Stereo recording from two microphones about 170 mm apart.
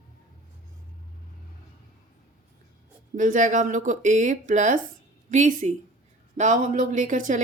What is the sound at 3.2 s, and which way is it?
Speech, 50° right (ahead or behind).